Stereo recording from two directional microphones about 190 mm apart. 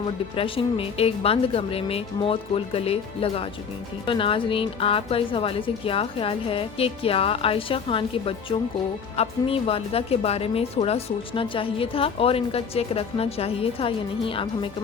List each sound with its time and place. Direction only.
0.3 s a woman's voice: 30° left (ahead or behind)